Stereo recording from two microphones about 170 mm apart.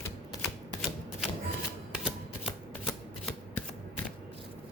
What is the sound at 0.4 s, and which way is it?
Typewriter, centre (ahead or behind).